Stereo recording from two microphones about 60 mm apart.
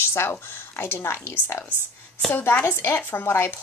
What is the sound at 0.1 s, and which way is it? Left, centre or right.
Speech, left.